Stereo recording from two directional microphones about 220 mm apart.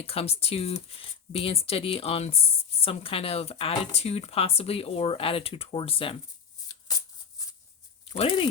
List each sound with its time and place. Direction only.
0.0 s speech: 25° left (ahead or behind)
6.7 s a sound: 15° left (ahead or behind)
8.1 s speech: 25° left (ahead or behind)